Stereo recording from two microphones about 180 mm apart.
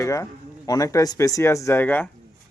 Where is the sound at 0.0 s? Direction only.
15° left (ahead or behind).